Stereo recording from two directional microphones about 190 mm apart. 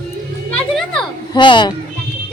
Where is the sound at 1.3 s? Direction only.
25° left (ahead or behind).